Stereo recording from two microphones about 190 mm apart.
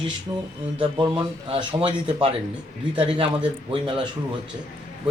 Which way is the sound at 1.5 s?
25° right (ahead or behind).